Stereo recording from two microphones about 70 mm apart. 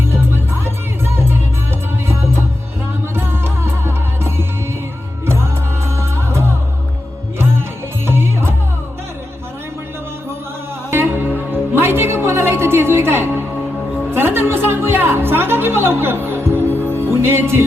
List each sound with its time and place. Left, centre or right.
0.0 s music: right
3.2 s music: right
8.0 s music: right
10.9 s music: right
16.6 s music: left
16.9 s music: right